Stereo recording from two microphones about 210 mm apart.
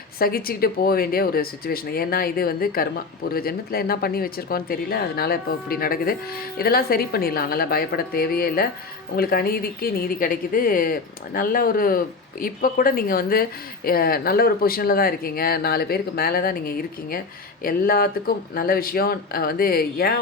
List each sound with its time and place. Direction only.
0.2 s a woman's voice: 45° left (ahead or behind)